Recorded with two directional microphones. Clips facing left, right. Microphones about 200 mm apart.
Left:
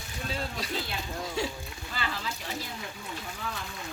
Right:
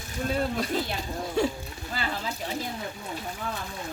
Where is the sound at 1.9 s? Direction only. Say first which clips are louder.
Right 3 dB; 40° right (ahead or behind).